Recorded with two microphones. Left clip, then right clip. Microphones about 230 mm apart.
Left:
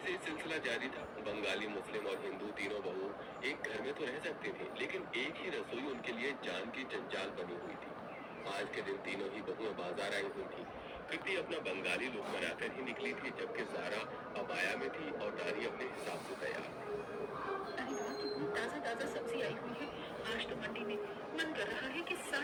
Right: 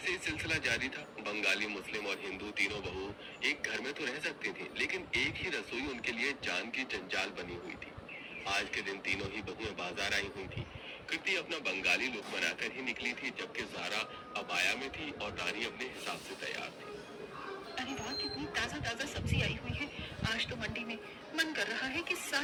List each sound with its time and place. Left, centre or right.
0.0 s speech: right
8.4 s speech: right
18.5 s speech: right
20.2 s vehicle: right
21.3 s a sound: right